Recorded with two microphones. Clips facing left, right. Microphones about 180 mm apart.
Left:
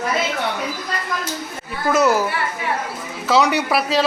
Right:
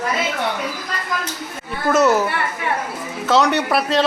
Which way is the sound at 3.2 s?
Centre (ahead or behind).